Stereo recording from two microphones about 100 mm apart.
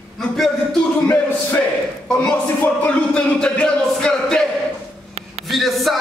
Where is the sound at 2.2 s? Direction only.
15° left (ahead or behind).